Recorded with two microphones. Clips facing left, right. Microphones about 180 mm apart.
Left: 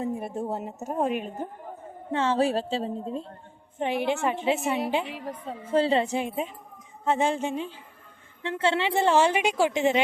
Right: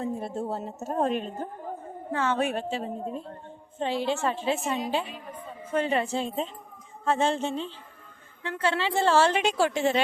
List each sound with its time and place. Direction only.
0.0 s a woman's voice: 15° left (ahead or behind)
2.1 s a woman's voice: 30° left (ahead or behind)
5.0 s a woman's voice: 80° left
5.7 s a woman's voice: 30° left (ahead or behind); by 7.7 s 10° left (ahead or behind)
8.4 s a woman's voice: 25° left (ahead or behind)